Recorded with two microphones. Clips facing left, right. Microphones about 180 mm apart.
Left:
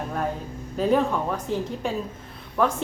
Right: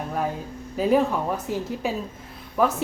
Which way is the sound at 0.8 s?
5° right (ahead or behind).